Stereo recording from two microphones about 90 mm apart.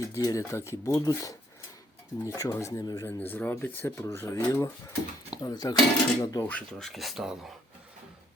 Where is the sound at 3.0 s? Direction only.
20° left (ahead or behind); by 6.4 s 45° left (ahead or behind).